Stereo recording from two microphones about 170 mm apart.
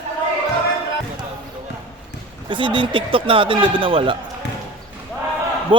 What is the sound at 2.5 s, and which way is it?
A man's voice, 30° right (ahead or behind).